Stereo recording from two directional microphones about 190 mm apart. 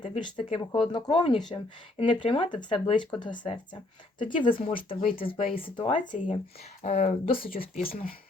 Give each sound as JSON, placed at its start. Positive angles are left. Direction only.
{"t": 0.0, "sound": "speech", "side_deg": 25}
{"t": 7.4, "sound": "speech", "side_deg": 50}